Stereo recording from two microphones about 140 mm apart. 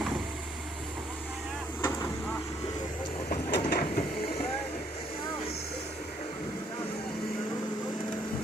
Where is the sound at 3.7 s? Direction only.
90° left.